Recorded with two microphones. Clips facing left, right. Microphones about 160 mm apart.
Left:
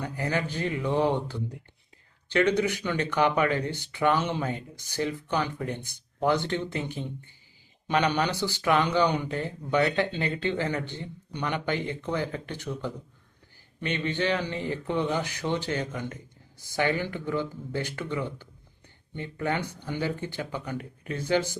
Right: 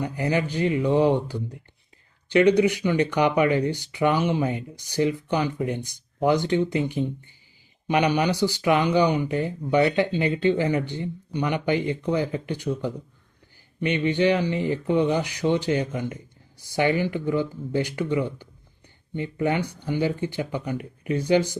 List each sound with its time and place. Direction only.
0.0 s speech: 15° right (ahead or behind)